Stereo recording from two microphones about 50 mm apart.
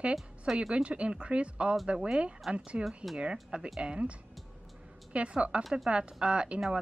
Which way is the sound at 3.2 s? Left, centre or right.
Centre.